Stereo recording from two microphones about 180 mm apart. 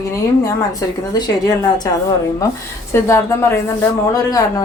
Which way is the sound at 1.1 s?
25° left (ahead or behind).